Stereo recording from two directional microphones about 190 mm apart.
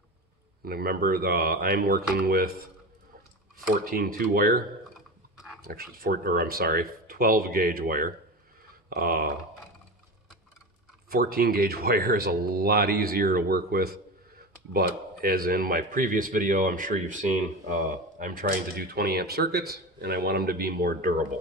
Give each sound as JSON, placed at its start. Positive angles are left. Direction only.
{"t": 0.7, "sound": "speech", "side_deg": -50}
{"t": 3.5, "sound": "speech", "side_deg": -50}
{"t": 11.1, "sound": "speech", "side_deg": -50}